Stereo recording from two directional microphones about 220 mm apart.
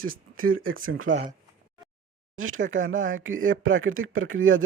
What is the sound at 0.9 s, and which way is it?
Speech, 65° right (ahead or behind).